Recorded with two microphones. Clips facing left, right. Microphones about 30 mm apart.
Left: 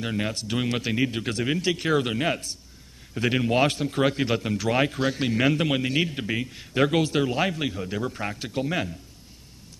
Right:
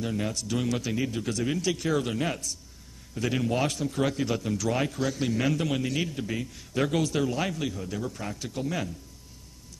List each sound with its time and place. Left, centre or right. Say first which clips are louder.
0.0 s a man's voice: left 2 dB; left